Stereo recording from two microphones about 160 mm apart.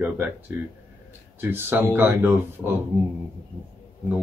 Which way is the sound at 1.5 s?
15° right (ahead or behind).